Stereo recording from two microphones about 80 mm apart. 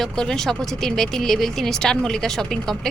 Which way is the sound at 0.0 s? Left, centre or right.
Centre.